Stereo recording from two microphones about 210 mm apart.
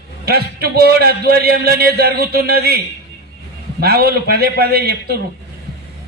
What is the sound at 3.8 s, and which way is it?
Speech, 50° right (ahead or behind).